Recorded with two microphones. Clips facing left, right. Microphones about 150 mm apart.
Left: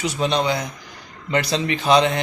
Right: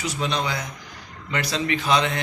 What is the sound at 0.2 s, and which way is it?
A man's voice, 25° left (ahead or behind).